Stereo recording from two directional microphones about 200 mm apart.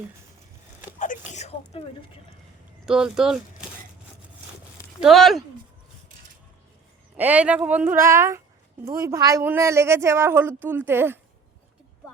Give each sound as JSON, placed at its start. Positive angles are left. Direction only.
{"t": 0.9, "sound": "a sound", "side_deg": 35}
{"t": 2.8, "sound": "speech", "side_deg": -5}
{"t": 4.9, "sound": "speech", "side_deg": 0}
{"t": 7.2, "sound": "a woman's voice", "side_deg": -5}